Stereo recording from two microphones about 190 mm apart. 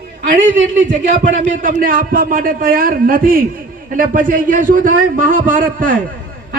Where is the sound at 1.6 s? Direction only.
45° right (ahead or behind).